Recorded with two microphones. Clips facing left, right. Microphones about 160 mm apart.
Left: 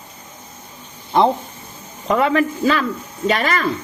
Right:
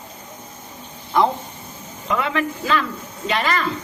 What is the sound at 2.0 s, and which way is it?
A man's voice, 45° left (ahead or behind).